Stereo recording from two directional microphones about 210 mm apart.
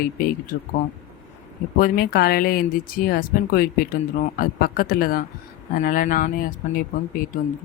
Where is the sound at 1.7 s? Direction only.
45° left (ahead or behind).